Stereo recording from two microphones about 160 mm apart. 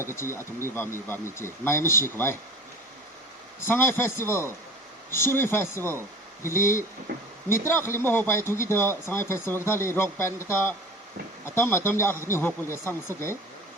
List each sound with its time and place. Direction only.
0.0 s speech: 15° left (ahead or behind)
3.7 s speech: 15° left (ahead or behind)
7.1 s speech: 90° right
7.7 s speech: 15° left (ahead or behind)